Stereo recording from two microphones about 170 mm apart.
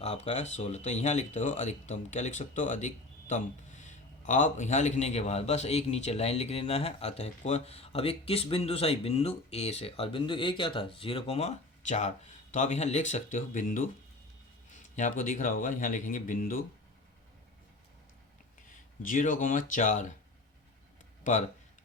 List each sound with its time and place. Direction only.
0.0 s speech: 40° left (ahead or behind); by 16.6 s 55° left (ahead or behind)
19.0 s speech: 50° left (ahead or behind)